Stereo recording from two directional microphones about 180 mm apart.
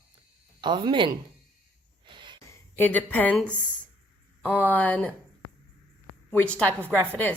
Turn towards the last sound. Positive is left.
turn(degrees=10)  # may be behind; listen again after turning